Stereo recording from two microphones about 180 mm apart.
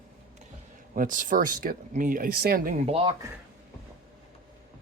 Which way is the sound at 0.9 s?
50° right (ahead or behind).